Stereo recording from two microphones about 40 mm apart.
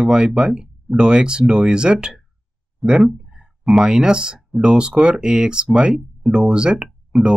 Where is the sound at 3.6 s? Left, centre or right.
Centre.